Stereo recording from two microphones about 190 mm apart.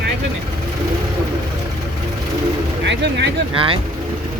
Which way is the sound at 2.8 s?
65° right (ahead or behind).